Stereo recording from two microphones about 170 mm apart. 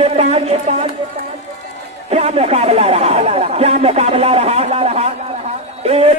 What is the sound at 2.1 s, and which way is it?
Speech, 40° right (ahead or behind).